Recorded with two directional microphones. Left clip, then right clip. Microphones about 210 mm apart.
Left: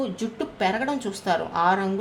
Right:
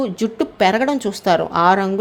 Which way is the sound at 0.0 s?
35° right (ahead or behind).